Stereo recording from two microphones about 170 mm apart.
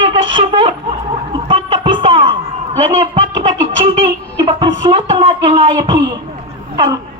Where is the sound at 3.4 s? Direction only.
30° right (ahead or behind).